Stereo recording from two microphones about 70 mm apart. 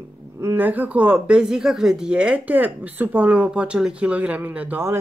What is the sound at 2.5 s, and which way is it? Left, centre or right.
Speech, right.